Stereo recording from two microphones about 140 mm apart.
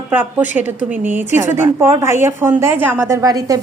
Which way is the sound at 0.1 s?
15° right (ahead or behind).